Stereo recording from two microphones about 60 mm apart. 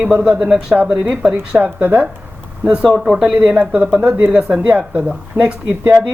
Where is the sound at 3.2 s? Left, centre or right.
Centre.